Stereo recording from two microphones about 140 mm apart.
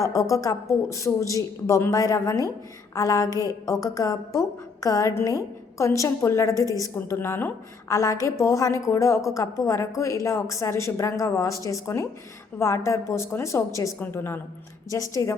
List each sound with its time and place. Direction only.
0.0 s a woman's voice: 25° left (ahead or behind)
3.2 s a sound: 20° right (ahead or behind)
3.7 s a woman's voice: 25° left (ahead or behind)